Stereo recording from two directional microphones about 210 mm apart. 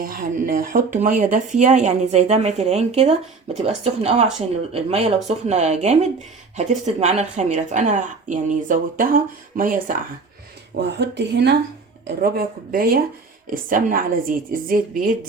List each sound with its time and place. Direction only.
0.0 s speech: 40° right (ahead or behind)
10.8 s speech: 55° right (ahead or behind)